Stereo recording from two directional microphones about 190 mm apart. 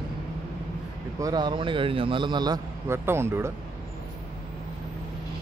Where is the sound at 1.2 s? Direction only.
20° right (ahead or behind).